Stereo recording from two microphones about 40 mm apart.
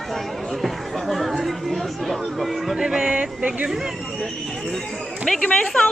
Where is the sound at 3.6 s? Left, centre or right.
Centre.